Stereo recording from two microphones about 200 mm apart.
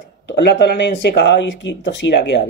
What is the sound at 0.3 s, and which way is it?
Speech, 55° left (ahead or behind).